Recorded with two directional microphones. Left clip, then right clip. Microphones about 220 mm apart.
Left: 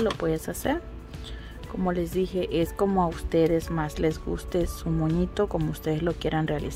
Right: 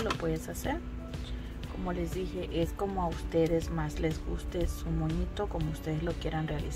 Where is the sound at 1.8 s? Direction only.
50° left (ahead or behind).